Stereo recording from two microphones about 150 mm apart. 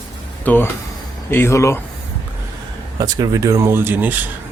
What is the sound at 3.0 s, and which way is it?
Speech, 25° right (ahead or behind).